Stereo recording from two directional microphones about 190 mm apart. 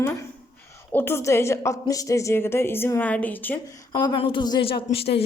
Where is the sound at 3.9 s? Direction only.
25° left (ahead or behind).